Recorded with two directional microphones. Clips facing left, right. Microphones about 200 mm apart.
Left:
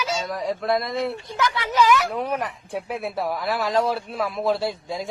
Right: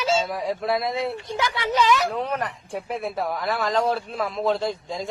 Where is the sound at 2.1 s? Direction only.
10° left (ahead or behind).